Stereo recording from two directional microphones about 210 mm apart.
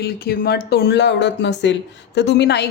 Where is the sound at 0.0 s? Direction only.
50° left (ahead or behind).